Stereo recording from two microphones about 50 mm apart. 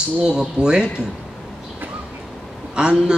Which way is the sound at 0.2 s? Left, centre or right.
Centre.